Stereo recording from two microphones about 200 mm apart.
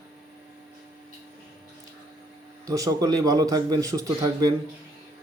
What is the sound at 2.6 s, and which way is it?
A man's voice, 15° right (ahead or behind).